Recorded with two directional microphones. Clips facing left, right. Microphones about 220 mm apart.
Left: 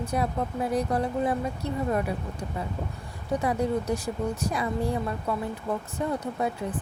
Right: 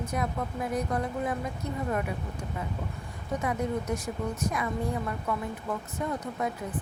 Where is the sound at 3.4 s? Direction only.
35° left (ahead or behind).